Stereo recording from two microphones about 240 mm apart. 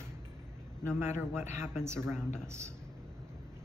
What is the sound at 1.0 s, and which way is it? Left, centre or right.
Speech, centre.